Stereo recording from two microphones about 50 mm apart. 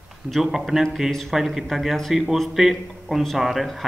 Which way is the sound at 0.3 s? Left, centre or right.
Centre.